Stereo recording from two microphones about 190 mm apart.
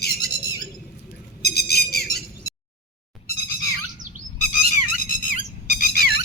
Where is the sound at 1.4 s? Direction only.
55° left (ahead or behind).